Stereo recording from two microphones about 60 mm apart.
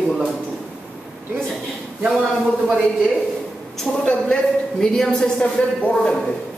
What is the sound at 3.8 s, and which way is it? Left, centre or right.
Speech, centre.